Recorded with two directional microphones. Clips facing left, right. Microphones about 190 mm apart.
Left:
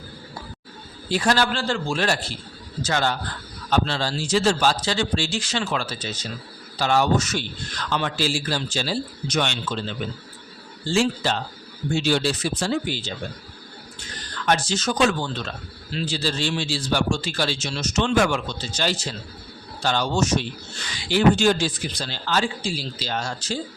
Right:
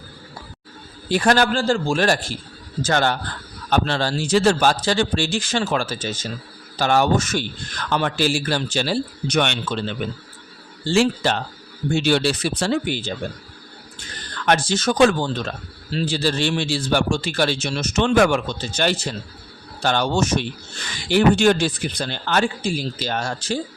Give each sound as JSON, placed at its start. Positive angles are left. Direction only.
{"t": 1.1, "sound": "speech", "side_deg": -50}
{"t": 2.8, "sound": "a man's voice", "side_deg": -60}
{"t": 14.4, "sound": "speech", "side_deg": -55}
{"t": 16.1, "sound": "a man's voice", "side_deg": -60}